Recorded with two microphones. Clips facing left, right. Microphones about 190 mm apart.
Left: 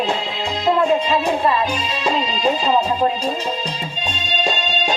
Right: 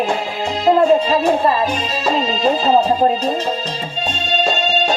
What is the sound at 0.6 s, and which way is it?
Music, 35° right (ahead or behind).